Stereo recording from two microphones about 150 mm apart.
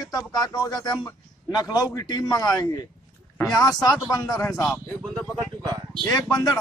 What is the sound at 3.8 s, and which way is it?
Speech, 25° left (ahead or behind).